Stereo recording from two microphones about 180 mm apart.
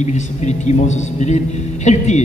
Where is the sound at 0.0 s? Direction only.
40° left (ahead or behind).